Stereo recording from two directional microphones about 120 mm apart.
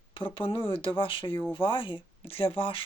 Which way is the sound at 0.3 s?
50° left (ahead or behind).